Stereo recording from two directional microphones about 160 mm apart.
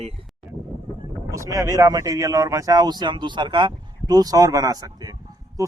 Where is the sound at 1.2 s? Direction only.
20° right (ahead or behind).